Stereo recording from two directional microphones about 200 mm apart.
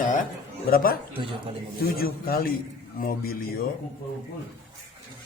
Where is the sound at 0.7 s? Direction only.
45° left (ahead or behind).